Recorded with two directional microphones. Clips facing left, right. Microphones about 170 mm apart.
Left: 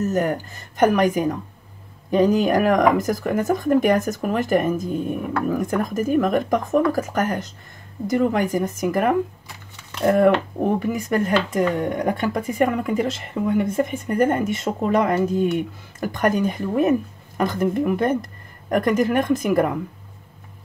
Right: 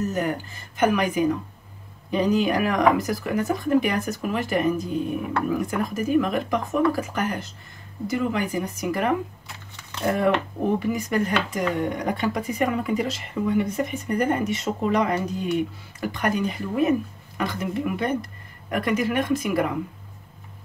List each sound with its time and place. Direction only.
0.0 s speech: 45° left (ahead or behind)